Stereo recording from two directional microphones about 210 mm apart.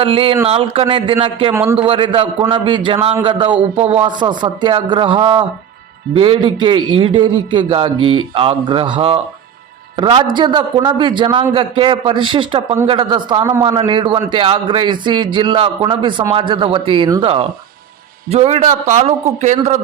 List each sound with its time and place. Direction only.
0.0 s a man's voice: 25° right (ahead or behind)